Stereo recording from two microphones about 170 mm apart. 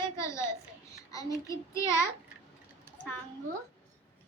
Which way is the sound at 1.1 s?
20° left (ahead or behind).